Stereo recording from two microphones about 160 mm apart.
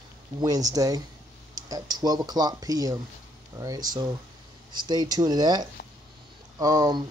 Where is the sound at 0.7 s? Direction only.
20° right (ahead or behind).